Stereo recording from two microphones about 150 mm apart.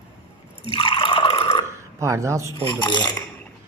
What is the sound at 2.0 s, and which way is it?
Speech, 20° right (ahead or behind).